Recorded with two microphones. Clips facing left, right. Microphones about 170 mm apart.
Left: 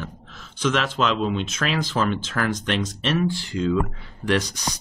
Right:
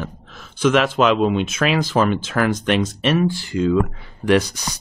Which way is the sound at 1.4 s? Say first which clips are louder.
Right 6 dB; 10° right (ahead or behind).